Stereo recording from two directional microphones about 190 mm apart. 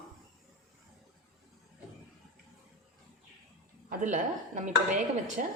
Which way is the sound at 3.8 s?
40° right (ahead or behind).